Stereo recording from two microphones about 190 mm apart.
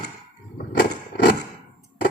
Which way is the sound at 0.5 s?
55° left (ahead or behind).